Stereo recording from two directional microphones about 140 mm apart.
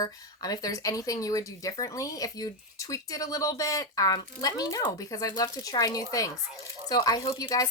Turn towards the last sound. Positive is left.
turn(degrees=25)  # may be behind; listen again after turning